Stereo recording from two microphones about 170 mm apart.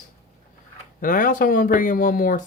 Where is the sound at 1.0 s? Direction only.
55° left (ahead or behind).